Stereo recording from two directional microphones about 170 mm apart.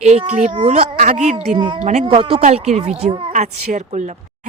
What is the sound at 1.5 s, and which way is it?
Speech, 25° right (ahead or behind).